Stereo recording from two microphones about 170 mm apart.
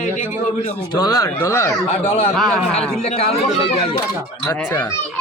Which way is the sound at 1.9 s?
40° left (ahead or behind).